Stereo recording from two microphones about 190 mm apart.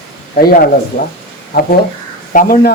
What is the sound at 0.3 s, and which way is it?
Speech, 50° left (ahead or behind).